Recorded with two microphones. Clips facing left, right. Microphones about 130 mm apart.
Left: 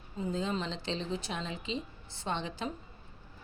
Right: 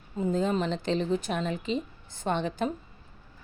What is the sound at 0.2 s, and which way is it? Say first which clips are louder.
Speech: right 7 dB; 50° right (ahead or behind).